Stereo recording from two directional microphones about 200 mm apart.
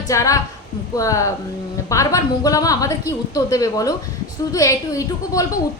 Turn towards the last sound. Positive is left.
turn(degrees=15)  # may be behind; listen again after turning